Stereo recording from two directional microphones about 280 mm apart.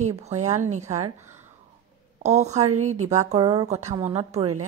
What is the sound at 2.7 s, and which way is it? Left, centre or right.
Speech, right.